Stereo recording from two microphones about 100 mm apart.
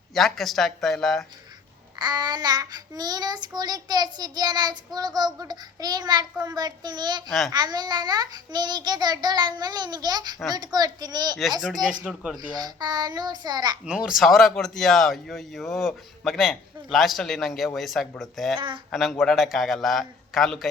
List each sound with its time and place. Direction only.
0.1 s speech: 5° left (ahead or behind)
2.0 s child singing: 45° right (ahead or behind)
7.3 s speech: centre (ahead or behind)
7.5 s child singing: 45° right (ahead or behind)
12.5 s child singing: 45° right (ahead or behind)
13.8 s speech: 10° right (ahead or behind)
18.5 s child singing: 55° right (ahead or behind)
18.9 s speech: centre (ahead or behind)